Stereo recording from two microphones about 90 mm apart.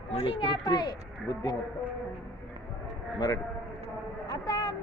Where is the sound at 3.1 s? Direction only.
45° left (ahead or behind).